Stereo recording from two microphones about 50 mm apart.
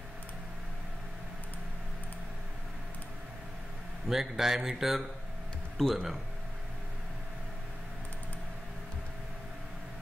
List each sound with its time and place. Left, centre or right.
4.1 s speech: centre
5.8 s speech: centre